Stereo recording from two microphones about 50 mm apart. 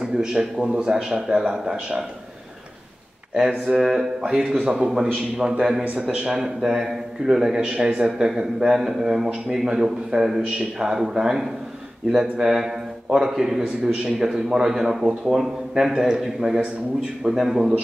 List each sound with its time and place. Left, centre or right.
0.0 s a man's voice: centre
3.6 s a man's voice: centre